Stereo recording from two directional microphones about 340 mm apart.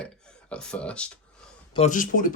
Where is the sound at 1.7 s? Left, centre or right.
Left.